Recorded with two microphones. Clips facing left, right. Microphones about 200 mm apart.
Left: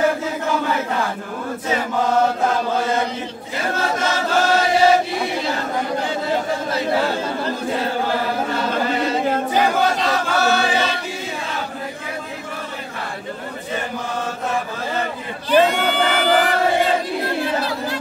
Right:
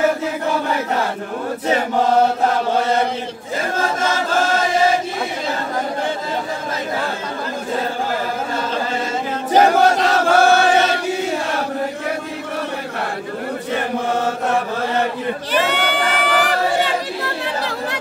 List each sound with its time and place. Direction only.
9.6 s battle cry: 45° right (ahead or behind)
10.1 s choir: 55° right (ahead or behind)
15.6 s crowd: 75° right (ahead or behind)